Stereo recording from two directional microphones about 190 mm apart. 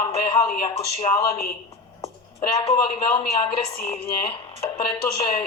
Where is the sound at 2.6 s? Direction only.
30° left (ahead or behind).